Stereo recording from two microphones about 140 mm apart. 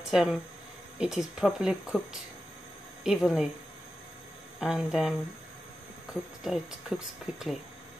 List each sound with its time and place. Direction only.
0.1 s speech: 5° right (ahead or behind)
3.0 s speech: centre (ahead or behind)
4.6 s speech: 5° right (ahead or behind)
6.4 s speech: 5° right (ahead or behind)